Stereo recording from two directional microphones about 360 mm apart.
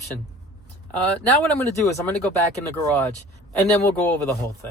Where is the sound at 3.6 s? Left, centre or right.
Centre.